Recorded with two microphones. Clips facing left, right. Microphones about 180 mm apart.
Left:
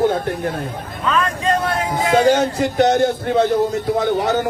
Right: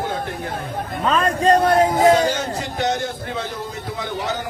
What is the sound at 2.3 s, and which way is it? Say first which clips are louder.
A man's voice: left 8 dB; 55° left (ahead or behind).